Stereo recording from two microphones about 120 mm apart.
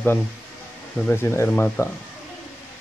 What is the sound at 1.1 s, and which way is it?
Speech, 20° left (ahead or behind).